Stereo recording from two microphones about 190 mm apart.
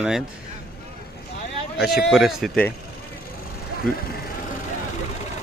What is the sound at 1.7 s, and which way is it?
Speech, centre (ahead or behind).